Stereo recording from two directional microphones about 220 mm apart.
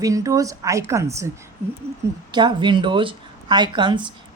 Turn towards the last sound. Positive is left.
turn(degrees=-20)  # may be behind; listen again after turning